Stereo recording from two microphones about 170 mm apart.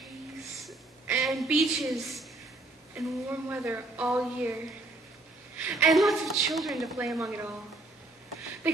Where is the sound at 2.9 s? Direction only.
10° right (ahead or behind).